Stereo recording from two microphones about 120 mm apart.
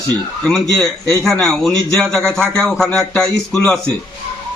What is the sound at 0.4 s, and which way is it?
A man's voice, 5° left (ahead or behind).